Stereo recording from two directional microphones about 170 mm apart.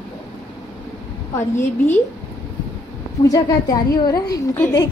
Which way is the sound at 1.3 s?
15° left (ahead or behind).